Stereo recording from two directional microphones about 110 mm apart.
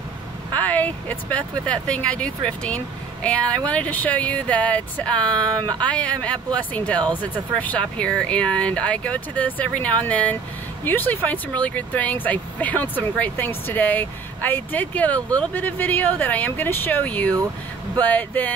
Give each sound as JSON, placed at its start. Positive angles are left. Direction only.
{"t": 0.6, "sound": "speech", "side_deg": 15}